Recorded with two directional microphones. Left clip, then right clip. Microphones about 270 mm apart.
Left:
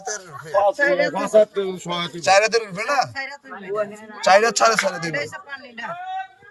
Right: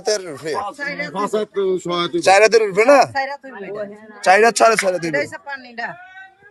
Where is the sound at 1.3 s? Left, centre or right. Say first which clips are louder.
Left 4 dB; right.